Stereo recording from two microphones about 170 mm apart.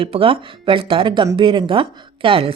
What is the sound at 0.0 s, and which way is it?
Speech, 30° right (ahead or behind).